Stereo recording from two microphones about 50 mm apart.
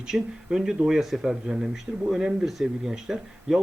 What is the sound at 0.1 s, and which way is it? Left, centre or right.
Speech, centre.